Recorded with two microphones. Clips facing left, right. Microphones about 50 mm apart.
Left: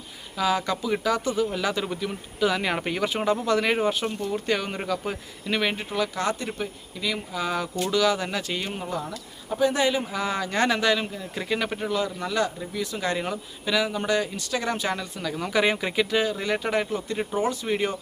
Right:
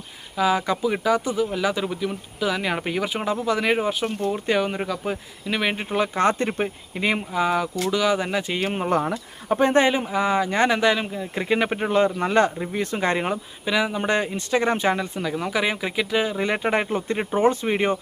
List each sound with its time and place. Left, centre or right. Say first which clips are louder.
0.3 s speech: right 3 dB; centre
5.7 s speech: right 4 dB; right
7.9 s speech: even; centre
8.6 s speech: right 7 dB; right
8.9 s speech: right 12 dB; right
9.5 s speech: right 4 dB; right
10.0 s speech: right 6 dB; right
13.7 s speech: right 2 dB; right
14.1 s speech: right 3 dB; right
15.3 s speech: left 2 dB; centre
16.2 s speech: right 3 dB; right